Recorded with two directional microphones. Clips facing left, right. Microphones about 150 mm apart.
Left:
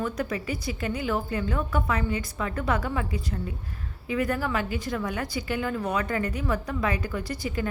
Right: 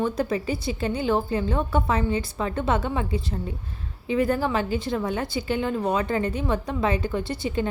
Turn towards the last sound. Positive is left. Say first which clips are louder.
# right 4 dB
turn(degrees=-25)  # may be behind; listen again after turning